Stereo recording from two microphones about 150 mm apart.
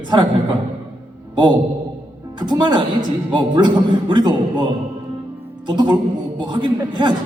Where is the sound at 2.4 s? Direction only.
30° right (ahead or behind).